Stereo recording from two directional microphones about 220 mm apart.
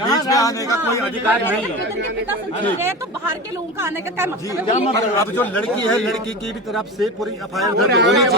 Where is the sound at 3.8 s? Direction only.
10° right (ahead or behind).